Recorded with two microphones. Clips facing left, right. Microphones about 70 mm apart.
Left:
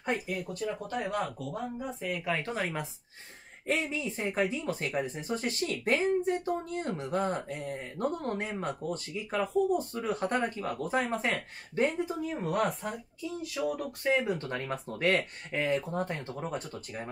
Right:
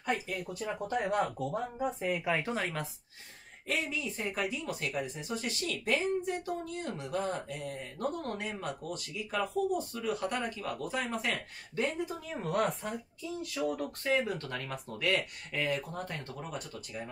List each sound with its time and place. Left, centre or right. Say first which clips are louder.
0.1 s speech: left 1 dB; centre
1.1 s speech: right 2 dB; right
2.3 s speech: even; centre
3.6 s speech: left 3 dB; left
12.2 s speech: left 1 dB; centre
14.0 s speech: left 3 dB; left